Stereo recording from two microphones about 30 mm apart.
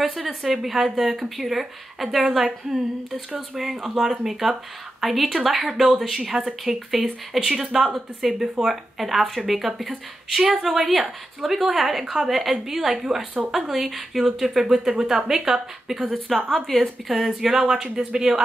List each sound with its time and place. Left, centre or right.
0.0 s speech: centre
3.3 s a woman's voice: centre
14.6 s a woman's voice: centre
16.0 s speech: centre
16.4 s a woman's voice: centre
17.1 s speech: centre
17.5 s speech: centre